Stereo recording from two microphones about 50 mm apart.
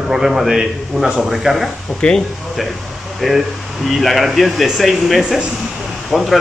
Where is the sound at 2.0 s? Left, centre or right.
Centre.